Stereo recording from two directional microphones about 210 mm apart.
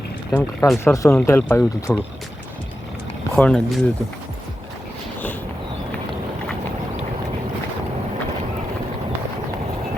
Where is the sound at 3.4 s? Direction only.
5° left (ahead or behind).